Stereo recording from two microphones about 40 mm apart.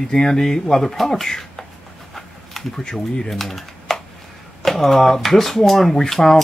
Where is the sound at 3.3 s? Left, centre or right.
Centre.